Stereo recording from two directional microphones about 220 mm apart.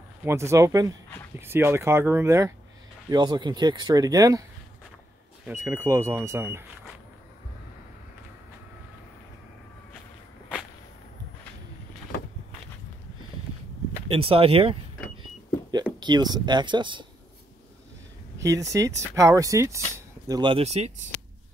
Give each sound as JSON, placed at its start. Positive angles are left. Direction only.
{"t": 0.2, "sound": "speech", "side_deg": -10}
{"t": 5.5, "sound": "speech", "side_deg": -10}
{"t": 14.0, "sound": "speech", "side_deg": -25}
{"t": 16.0, "sound": "speech", "side_deg": -20}
{"t": 18.4, "sound": "speech", "side_deg": -15}